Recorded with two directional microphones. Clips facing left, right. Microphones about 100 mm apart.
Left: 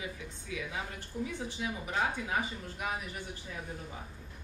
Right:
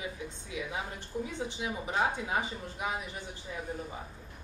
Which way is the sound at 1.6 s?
25° right (ahead or behind).